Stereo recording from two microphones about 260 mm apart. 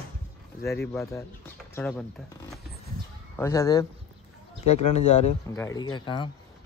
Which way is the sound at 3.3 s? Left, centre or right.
Centre.